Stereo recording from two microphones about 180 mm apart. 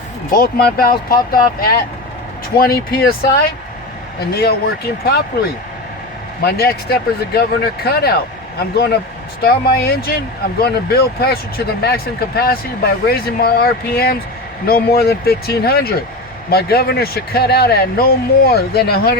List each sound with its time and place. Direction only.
0.3 s speech: 55° left (ahead or behind)
6.4 s speech: 60° left (ahead or behind)
9.4 s speech: 60° left (ahead or behind)